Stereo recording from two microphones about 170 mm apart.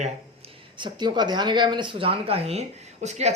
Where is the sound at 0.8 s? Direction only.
25° right (ahead or behind).